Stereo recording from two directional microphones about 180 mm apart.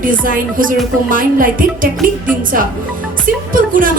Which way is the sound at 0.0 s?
50° right (ahead or behind).